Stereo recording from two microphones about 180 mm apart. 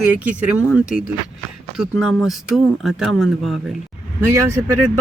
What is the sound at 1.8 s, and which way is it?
Speech, centre (ahead or behind).